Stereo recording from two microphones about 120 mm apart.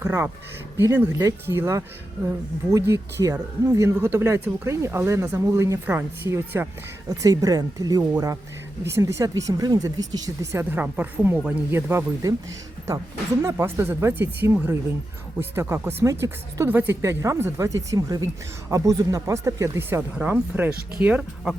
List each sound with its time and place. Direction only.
0.0 s speech: 20° right (ahead or behind)
7.1 s speech: 30° right (ahead or behind)
13.4 s speech: 20° right (ahead or behind)